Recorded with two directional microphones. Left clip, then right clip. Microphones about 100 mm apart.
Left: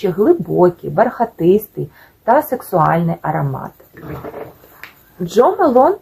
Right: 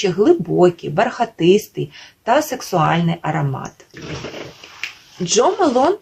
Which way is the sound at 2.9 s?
10° right (ahead or behind).